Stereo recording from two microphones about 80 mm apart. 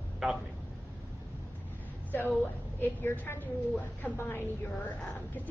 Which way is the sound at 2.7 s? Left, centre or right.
Left.